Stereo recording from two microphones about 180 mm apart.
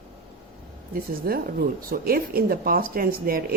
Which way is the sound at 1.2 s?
55° right (ahead or behind).